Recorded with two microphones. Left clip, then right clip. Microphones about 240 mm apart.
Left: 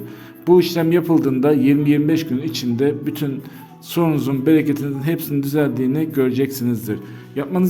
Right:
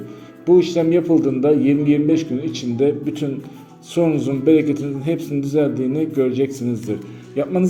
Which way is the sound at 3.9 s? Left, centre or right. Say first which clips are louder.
Right 1 dB; left.